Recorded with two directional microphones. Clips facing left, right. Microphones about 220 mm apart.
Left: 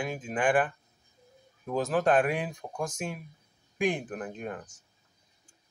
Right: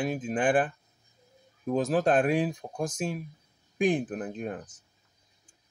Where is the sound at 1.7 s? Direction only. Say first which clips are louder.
Right 1 dB; 30° right (ahead or behind).